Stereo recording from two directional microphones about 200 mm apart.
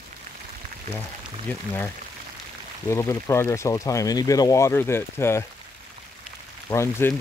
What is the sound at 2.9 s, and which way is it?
Speech, 15° left (ahead or behind).